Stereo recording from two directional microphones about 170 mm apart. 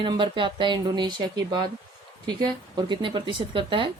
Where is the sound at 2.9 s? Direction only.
30° right (ahead or behind).